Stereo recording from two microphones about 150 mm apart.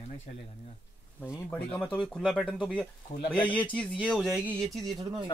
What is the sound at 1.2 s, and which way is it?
Speech, 10° right (ahead or behind).